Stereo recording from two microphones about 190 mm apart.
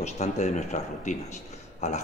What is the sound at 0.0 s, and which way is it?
Speech, 40° left (ahead or behind).